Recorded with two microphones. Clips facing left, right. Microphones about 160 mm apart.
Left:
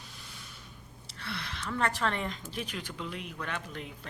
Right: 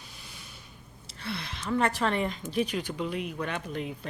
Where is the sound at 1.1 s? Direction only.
20° right (ahead or behind).